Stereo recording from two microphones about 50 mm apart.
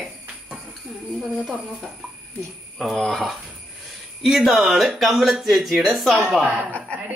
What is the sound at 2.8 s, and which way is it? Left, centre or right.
Speech, centre.